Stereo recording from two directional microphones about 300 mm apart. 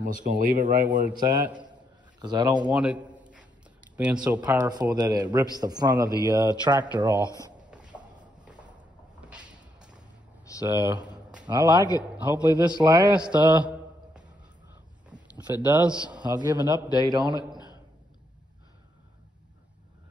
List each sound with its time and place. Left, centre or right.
0.0 s speech: right
1.1 s a man's voice: centre
1.7 s a sound: centre
3.9 s speech: centre
9.2 s vehicle: centre
11.0 s a sound: centre
12.2 s a man's voice: centre
15.3 s a man's voice: centre